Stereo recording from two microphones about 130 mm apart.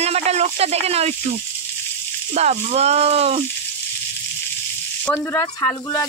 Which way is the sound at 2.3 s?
60° right (ahead or behind).